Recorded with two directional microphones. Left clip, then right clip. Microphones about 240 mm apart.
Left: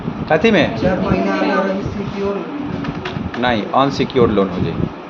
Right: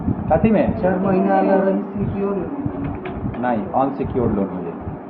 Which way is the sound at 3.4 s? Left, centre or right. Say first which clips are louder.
Left 4 dB; left.